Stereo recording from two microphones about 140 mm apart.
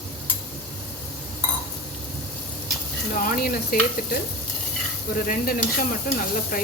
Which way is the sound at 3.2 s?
90° left.